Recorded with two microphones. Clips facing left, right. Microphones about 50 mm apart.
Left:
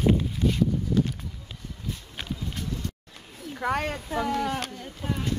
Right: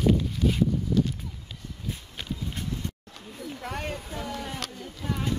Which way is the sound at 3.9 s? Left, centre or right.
Left.